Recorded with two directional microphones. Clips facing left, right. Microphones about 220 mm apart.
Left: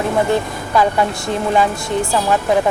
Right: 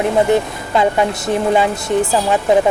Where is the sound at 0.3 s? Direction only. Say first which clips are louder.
Right 3 dB; 20° right (ahead or behind).